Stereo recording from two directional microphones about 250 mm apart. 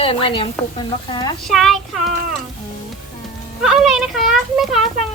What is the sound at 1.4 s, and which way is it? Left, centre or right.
Speech, centre.